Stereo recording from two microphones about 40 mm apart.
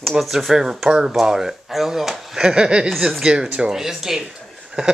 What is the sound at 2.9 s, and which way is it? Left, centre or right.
Speech, centre.